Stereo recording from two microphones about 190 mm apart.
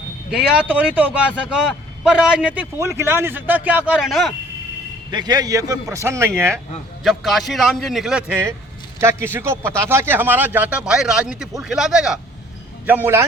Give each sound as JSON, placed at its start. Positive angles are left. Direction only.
{"t": 0.3, "sound": "a man's voice", "side_deg": -5}
{"t": 5.1, "sound": "a man's voice", "side_deg": -20}
{"t": 7.0, "sound": "speech", "side_deg": 0}
{"t": 9.0, "sound": "a man's voice", "side_deg": -15}